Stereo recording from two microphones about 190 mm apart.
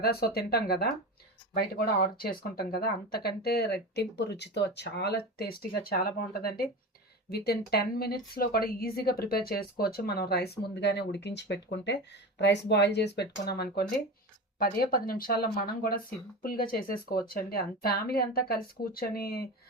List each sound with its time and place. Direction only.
0.0 s speech: 55° left (ahead or behind)